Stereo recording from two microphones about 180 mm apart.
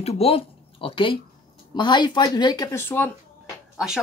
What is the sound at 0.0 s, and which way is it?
Speech, 35° left (ahead or behind).